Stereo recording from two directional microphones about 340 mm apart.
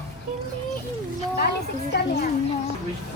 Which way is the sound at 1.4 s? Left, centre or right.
Left.